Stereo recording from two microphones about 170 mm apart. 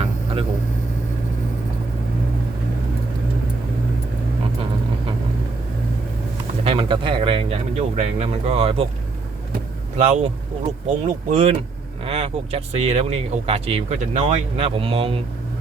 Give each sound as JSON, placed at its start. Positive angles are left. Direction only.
{"t": 6.7, "sound": "speech", "side_deg": -30}
{"t": 10.0, "sound": "speech", "side_deg": -40}